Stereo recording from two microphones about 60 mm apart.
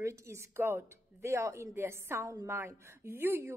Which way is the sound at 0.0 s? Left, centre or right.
Right.